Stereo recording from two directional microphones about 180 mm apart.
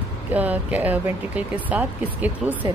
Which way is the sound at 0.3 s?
10° right (ahead or behind).